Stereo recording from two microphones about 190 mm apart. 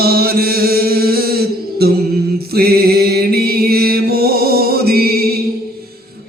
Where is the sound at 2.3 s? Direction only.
55° right (ahead or behind).